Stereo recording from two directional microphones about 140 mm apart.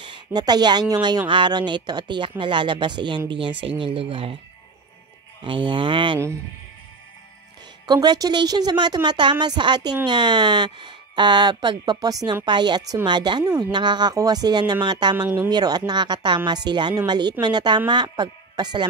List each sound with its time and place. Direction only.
0.0 s a woman's voice: 35° right (ahead or behind)
5.4 s speech: 35° right (ahead or behind)
7.8 s speech: 30° right (ahead or behind)
15.1 s speech: 15° right (ahead or behind)
15.5 s speech: 30° right (ahead or behind)